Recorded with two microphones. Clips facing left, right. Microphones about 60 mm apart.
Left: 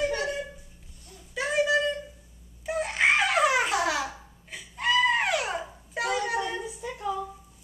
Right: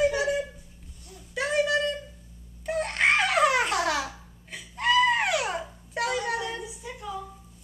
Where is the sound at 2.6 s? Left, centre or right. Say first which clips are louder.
Even; centre.